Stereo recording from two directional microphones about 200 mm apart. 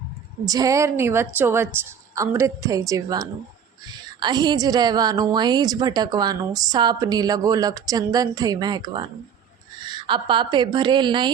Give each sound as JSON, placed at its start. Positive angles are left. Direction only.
{"t": 0.4, "sound": "a woman's voice", "side_deg": -15}